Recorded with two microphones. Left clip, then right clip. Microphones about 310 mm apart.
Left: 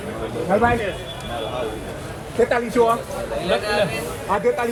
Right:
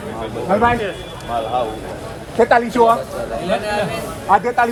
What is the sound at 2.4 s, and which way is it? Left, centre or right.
Speech, centre.